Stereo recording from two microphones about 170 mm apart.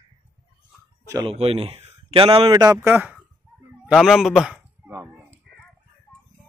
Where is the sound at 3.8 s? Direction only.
Centre (ahead or behind).